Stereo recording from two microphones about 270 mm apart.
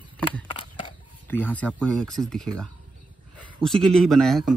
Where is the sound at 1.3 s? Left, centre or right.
Centre.